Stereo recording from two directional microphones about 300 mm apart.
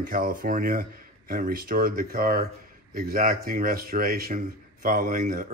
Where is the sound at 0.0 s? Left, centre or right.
Right.